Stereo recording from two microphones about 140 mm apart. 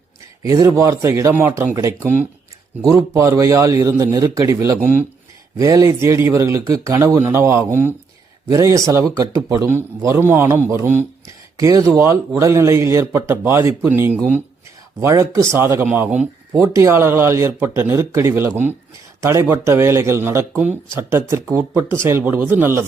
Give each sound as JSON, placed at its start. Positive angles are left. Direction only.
{"t": 0.4, "sound": "speech", "side_deg": -20}
{"t": 2.8, "sound": "speech", "side_deg": -20}